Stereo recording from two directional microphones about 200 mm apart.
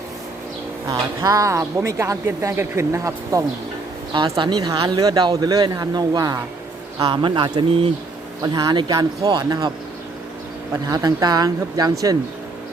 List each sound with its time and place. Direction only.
0.9 s speech: 15° right (ahead or behind)
10.8 s speech: 20° right (ahead or behind)